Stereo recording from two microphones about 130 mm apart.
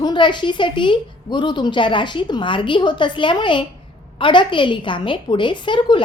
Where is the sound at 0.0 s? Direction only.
35° left (ahead or behind).